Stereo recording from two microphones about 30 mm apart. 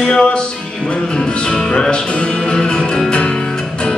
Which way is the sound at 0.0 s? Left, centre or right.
Left.